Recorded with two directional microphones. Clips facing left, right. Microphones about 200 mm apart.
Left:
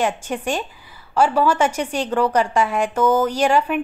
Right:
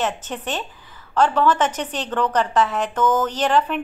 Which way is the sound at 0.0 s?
10° left (ahead or behind).